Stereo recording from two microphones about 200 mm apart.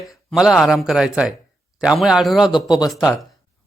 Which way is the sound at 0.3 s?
Centre (ahead or behind).